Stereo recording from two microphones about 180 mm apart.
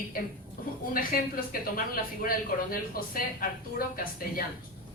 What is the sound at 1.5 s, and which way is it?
Speech, 55° left (ahead or behind).